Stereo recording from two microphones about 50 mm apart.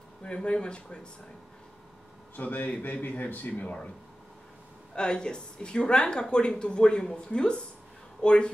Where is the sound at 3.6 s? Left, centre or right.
Left.